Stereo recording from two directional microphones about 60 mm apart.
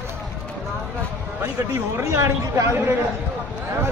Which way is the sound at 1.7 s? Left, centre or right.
Right.